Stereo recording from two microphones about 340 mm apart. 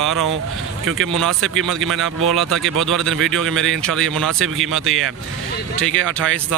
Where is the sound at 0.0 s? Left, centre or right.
Centre.